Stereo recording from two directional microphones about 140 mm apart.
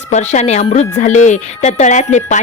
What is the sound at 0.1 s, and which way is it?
Speech, 55° left (ahead or behind).